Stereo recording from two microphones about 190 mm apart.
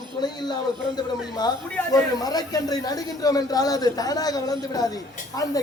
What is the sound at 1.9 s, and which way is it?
Speech, 20° left (ahead or behind).